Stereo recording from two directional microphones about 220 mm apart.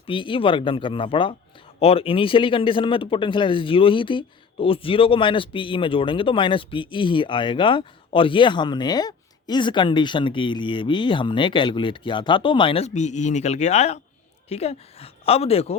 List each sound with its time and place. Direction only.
0.0 s speech: 20° left (ahead or behind)